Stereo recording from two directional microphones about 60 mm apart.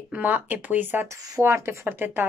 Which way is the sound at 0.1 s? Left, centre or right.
Right.